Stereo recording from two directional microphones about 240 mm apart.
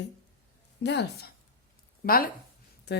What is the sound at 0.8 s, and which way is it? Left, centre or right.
Speech, left.